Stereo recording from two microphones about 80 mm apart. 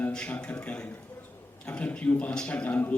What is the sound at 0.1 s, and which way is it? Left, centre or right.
A man's voice, centre.